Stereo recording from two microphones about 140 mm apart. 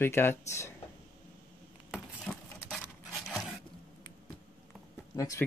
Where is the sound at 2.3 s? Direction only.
10° left (ahead or behind).